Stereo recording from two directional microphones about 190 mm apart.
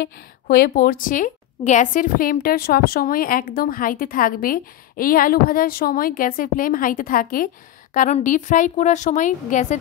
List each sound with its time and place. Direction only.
0.0 s a woman's voice: 50° left (ahead or behind)